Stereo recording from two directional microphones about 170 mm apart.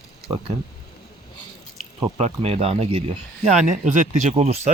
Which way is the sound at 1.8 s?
40° right (ahead or behind).